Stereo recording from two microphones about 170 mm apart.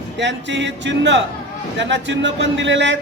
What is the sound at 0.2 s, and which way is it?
Speech, 90° right.